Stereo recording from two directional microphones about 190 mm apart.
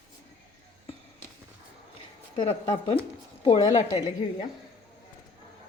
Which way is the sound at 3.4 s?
35° left (ahead or behind).